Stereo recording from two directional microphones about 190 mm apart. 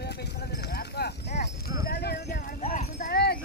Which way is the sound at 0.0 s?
60° left (ahead or behind).